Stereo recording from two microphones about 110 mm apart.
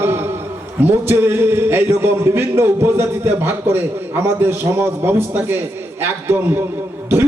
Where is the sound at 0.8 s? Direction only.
20° right (ahead or behind).